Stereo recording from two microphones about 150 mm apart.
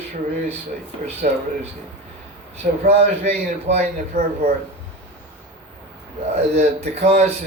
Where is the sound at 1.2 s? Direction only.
65° right (ahead or behind).